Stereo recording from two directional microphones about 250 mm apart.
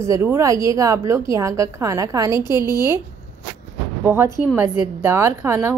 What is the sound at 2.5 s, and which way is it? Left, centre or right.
Speech, centre.